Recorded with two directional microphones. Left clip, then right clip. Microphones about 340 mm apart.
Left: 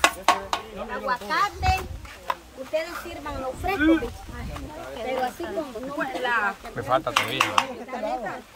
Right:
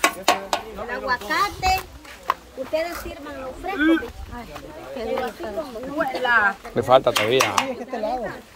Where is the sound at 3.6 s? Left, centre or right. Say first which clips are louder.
Left 2 dB; left.